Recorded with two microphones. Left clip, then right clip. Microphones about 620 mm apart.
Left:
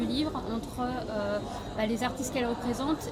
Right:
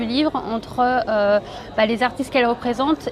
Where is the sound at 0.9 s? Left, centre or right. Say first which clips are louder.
Right 16 dB; right.